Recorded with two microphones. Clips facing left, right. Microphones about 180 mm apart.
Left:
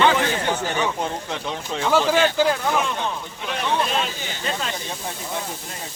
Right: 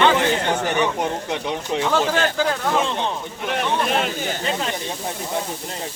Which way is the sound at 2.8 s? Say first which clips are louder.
Right 2 dB; 25° right (ahead or behind).